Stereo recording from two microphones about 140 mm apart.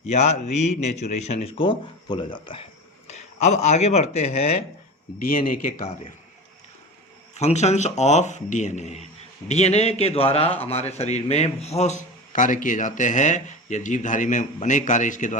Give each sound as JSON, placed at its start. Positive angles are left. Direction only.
{"t": 0.0, "sound": "a man's voice", "side_deg": 55}
{"t": 3.1, "sound": "speech", "side_deg": 55}
{"t": 5.3, "sound": "a man's voice", "side_deg": 80}
{"t": 7.3, "sound": "a man's voice", "side_deg": 50}